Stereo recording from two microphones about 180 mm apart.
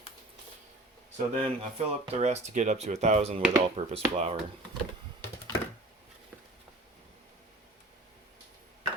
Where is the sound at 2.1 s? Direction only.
40° right (ahead or behind).